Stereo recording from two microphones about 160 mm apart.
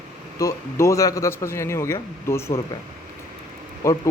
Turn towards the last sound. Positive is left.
turn(degrees=15)  # may be behind; listen again after turning